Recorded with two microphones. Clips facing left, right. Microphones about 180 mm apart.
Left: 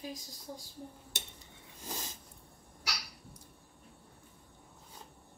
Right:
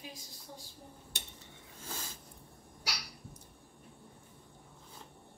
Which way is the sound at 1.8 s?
15° left (ahead or behind).